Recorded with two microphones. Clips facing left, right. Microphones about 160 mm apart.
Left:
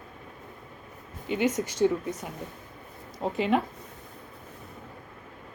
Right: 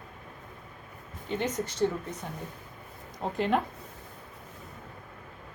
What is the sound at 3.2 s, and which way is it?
Speech, 5° left (ahead or behind).